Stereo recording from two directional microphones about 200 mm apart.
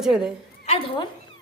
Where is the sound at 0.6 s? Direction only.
30° left (ahead or behind).